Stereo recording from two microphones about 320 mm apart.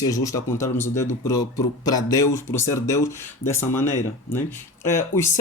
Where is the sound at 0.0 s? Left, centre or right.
Centre.